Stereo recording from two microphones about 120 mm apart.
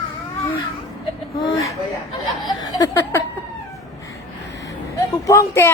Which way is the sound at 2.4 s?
35° left (ahead or behind).